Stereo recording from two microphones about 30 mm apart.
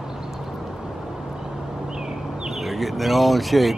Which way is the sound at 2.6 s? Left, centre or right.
Centre.